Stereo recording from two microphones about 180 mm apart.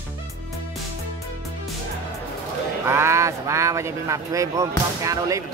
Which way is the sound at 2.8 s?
15° right (ahead or behind).